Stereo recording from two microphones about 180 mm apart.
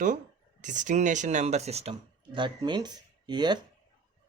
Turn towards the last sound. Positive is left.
turn(degrees=-25)  # may be behind; listen again after turning